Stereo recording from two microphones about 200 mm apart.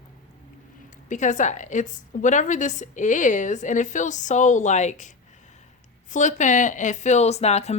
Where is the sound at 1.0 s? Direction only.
40° left (ahead or behind).